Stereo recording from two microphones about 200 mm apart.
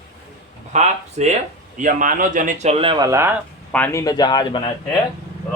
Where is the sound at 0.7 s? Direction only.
35° right (ahead or behind); by 3.3 s 15° right (ahead or behind).